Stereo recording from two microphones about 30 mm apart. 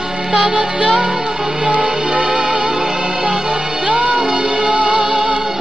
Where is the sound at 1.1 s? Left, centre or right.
Right.